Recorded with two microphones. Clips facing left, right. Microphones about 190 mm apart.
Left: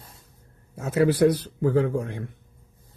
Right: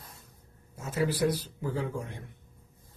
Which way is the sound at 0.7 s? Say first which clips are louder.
Left 9 dB; 65° left (ahead or behind).